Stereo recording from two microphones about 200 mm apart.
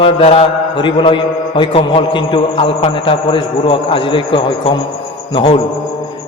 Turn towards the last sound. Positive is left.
turn(degrees=25)  # may be behind; listen again after turning